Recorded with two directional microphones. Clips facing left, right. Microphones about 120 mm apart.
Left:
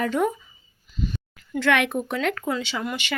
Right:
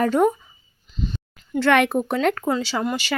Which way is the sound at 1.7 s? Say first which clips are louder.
Right 4 dB; 40° right (ahead or behind).